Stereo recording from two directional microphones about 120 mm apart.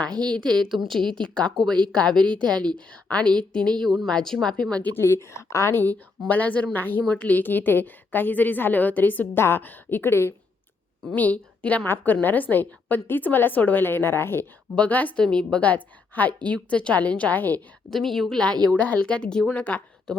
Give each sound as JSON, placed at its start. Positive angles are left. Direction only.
{"t": 0.3, "sound": "speech", "side_deg": -40}
{"t": 0.6, "sound": "a woman's voice", "side_deg": 0}
{"t": 17.9, "sound": "a woman's voice", "side_deg": 5}